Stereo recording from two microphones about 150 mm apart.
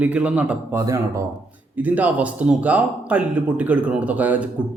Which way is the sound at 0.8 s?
20° right (ahead or behind).